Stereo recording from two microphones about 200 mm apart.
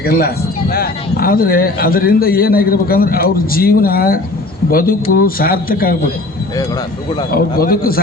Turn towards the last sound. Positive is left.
turn(degrees=50)  # may be behind; listen again after turning